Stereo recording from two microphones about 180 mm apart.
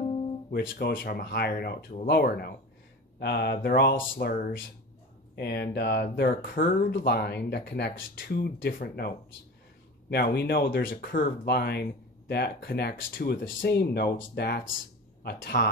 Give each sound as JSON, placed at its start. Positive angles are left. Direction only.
{"t": 0.5, "sound": "speech", "side_deg": 60}